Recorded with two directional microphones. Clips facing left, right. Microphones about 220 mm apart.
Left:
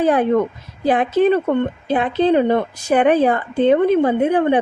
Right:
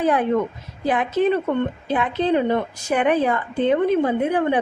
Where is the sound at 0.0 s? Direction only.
30° left (ahead or behind).